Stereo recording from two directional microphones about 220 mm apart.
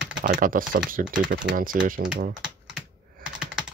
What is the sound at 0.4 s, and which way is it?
Speech, 40° right (ahead or behind).